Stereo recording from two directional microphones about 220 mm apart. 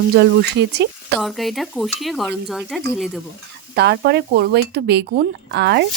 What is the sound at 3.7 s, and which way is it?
Speech, 50° right (ahead or behind).